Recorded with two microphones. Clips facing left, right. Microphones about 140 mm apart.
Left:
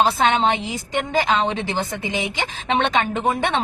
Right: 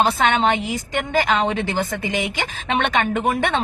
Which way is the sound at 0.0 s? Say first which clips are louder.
Even; 25° left (ahead or behind).